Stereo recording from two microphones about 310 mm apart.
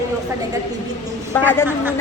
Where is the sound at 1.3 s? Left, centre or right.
Centre.